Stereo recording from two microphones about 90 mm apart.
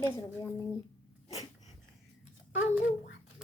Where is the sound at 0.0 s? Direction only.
30° left (ahead or behind).